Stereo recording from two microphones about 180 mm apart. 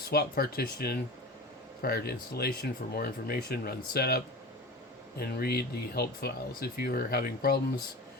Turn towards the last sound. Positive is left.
turn(degrees=60)  # may be behind; listen again after turning